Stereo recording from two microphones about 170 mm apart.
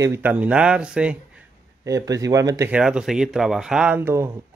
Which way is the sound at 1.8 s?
20° right (ahead or behind).